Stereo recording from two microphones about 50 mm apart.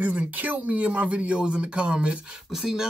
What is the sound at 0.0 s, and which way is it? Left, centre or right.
Speech, right.